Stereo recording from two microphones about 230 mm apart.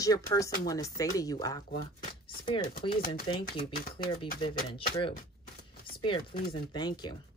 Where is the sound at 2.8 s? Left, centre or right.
Left.